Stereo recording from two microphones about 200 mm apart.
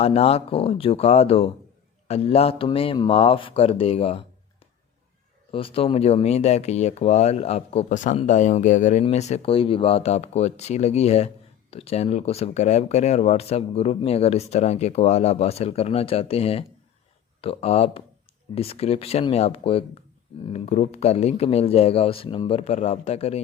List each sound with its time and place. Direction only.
0.0 s speech: 30° left (ahead or behind)
5.5 s speech: 25° left (ahead or behind)